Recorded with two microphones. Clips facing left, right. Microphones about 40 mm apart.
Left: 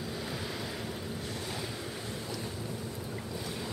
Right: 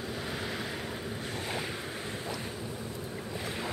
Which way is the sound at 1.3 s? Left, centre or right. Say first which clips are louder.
Right 5 dB; right.